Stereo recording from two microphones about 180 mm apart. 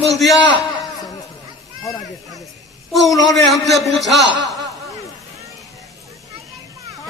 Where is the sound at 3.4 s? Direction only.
Centre (ahead or behind).